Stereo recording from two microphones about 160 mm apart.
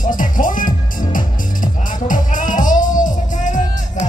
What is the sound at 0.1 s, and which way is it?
Music, 55° left (ahead or behind).